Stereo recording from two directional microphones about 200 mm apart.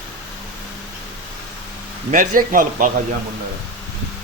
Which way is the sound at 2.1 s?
40° right (ahead or behind).